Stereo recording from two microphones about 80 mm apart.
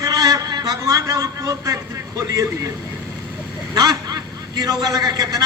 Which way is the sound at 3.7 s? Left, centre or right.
Right.